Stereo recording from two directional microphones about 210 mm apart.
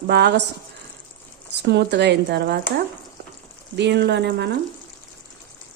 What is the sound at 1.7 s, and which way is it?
Speech, 55° right (ahead or behind).